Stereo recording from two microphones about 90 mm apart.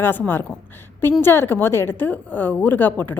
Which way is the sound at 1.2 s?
25° left (ahead or behind).